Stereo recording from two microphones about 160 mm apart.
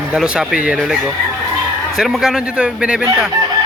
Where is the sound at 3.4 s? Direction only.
20° right (ahead or behind).